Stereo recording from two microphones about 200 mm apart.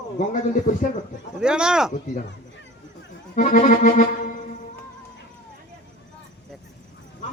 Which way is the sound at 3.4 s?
40° left (ahead or behind).